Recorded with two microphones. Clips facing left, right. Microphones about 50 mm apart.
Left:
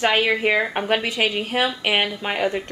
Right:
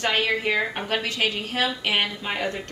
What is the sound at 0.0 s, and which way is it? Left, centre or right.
Speech, centre.